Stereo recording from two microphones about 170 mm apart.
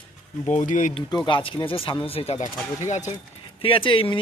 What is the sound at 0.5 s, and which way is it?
Speech, 50° left (ahead or behind).